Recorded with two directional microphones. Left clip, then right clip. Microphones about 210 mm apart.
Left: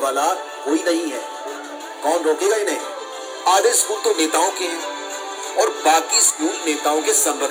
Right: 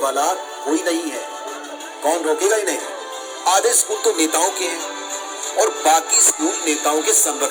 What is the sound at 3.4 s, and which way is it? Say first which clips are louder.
Music: left 1 dB; 30° right (ahead or behind).